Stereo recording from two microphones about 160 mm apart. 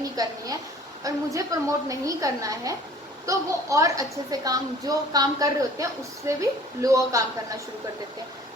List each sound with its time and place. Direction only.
0.0 s a woman's voice: 20° right (ahead or behind)